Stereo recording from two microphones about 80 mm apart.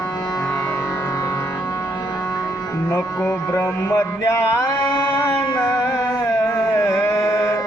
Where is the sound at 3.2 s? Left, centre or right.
Left.